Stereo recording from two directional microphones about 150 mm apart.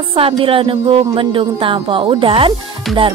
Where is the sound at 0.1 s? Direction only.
35° right (ahead or behind).